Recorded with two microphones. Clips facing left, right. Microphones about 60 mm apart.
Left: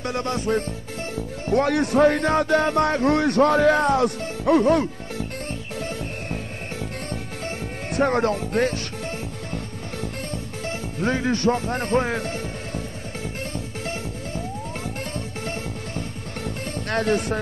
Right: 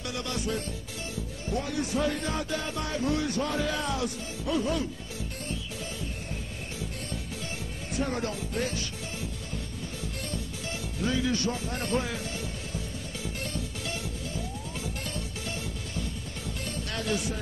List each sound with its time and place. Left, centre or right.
0.0 s music: left
1.1 s speech: left
6.3 s music: left
10.3 s music: left
16.0 s music: left